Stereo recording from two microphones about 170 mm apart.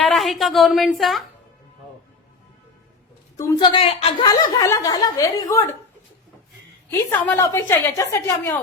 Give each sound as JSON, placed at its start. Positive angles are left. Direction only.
{"t": 0.1, "sound": "a woman's voice", "side_deg": 0}
{"t": 3.3, "sound": "a woman's voice", "side_deg": 15}
{"t": 3.6, "sound": "a woman's voice", "side_deg": 30}
{"t": 7.1, "sound": "a woman's voice", "side_deg": 15}